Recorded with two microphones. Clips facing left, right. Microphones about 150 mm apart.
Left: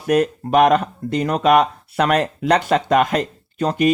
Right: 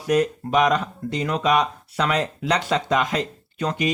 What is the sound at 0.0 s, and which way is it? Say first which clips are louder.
Speech: left 3 dB; 55° left (ahead or behind).